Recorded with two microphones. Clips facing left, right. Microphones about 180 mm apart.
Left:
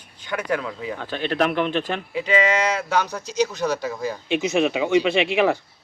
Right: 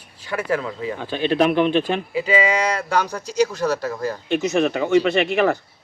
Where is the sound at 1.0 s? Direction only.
15° right (ahead or behind).